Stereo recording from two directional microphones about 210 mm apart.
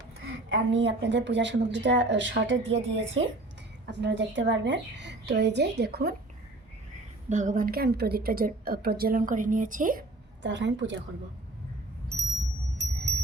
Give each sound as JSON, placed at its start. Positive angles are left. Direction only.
{"t": 0.5, "sound": "a woman's voice", "side_deg": -55}
{"t": 7.3, "sound": "a woman's voice", "side_deg": -35}
{"t": 10.4, "sound": "a woman's voice", "side_deg": -55}